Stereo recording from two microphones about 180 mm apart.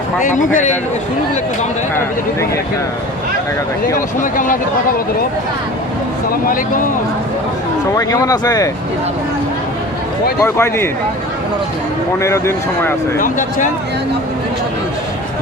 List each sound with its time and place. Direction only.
0.2 s speech: 45° left (ahead or behind)
3.9 s speech: 50° left (ahead or behind)
6.5 s speech: 50° left (ahead or behind)
7.9 s speech: 20° left (ahead or behind)
10.4 s speech: 15° left (ahead or behind)
12.2 s speech: 15° left (ahead or behind)
13.1 s speech: 50° left (ahead or behind)